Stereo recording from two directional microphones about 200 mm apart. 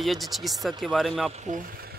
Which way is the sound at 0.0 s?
Centre (ahead or behind).